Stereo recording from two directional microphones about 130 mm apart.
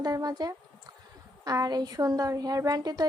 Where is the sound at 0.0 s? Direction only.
30° right (ahead or behind).